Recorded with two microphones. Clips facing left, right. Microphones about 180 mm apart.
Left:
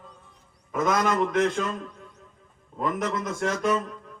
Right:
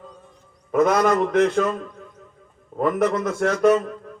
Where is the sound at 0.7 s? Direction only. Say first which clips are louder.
Right 6 dB; 55° right (ahead or behind).